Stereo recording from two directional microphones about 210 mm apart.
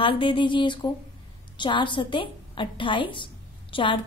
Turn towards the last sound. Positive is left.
turn(degrees=25)  # may be behind; listen again after turning